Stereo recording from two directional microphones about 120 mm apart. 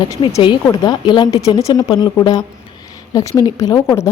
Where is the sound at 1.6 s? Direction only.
30° left (ahead or behind).